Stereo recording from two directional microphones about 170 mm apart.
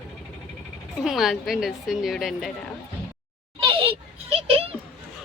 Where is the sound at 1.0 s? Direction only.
Centre (ahead or behind).